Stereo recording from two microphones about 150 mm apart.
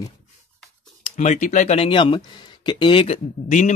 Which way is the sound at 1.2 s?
50° left (ahead or behind).